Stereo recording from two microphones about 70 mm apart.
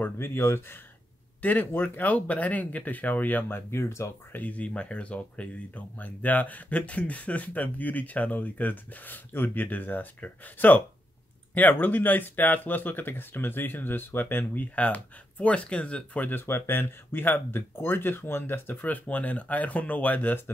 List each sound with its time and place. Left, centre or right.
0.0 s speech: left
1.4 s speech: left
4.3 s speech: left